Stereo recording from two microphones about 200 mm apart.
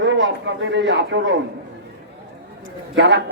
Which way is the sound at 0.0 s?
65° right (ahead or behind).